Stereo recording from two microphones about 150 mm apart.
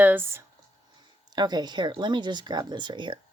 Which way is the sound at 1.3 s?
30° right (ahead or behind).